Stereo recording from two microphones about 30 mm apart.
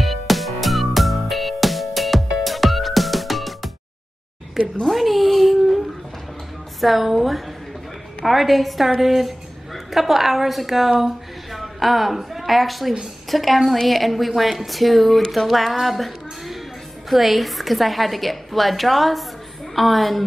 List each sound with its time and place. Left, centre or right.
0.0 s music: centre
4.8 s a sound: centre
6.8 s a woman's voice: centre